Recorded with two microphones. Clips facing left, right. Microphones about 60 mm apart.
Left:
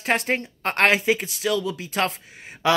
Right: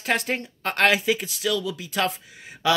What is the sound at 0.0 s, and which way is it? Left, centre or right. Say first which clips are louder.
Speech: left 2 dB; left.